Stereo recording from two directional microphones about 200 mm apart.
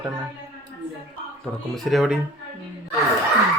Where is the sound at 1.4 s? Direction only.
Centre (ahead or behind).